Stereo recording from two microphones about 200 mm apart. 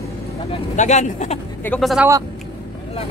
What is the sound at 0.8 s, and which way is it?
Speech, 35° left (ahead or behind).